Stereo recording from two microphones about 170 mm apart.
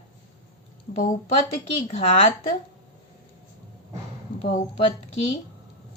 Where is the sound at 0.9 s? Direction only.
35° left (ahead or behind).